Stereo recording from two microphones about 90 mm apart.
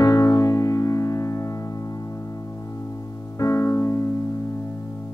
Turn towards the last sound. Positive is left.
turn(degrees=30)  # may be behind; listen again after turning